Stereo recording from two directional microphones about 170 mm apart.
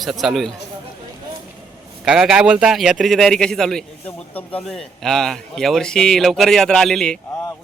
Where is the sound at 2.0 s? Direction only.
5° right (ahead or behind).